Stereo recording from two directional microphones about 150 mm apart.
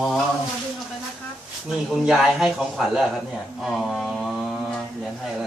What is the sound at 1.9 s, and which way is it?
A man's voice, centre (ahead or behind).